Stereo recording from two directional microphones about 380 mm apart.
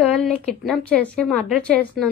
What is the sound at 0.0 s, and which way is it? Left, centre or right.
A woman's voice, centre.